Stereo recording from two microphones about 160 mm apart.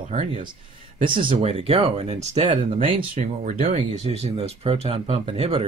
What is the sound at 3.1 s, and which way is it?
Speech, 50° right (ahead or behind).